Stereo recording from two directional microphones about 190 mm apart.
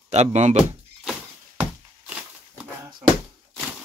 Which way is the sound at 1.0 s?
5° right (ahead or behind).